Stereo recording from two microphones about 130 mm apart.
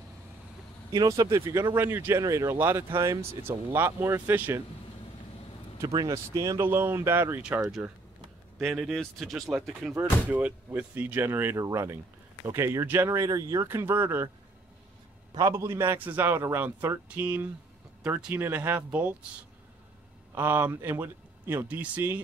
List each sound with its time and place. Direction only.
0.9 s a man's voice: 30° right (ahead or behind)
5.9 s speech: 25° right (ahead or behind)
8.5 s a man's voice: centre (ahead or behind); by 14.3 s 15° right (ahead or behind)
15.3 s a man's voice: 25° right (ahead or behind)
20.3 s speech: 15° right (ahead or behind)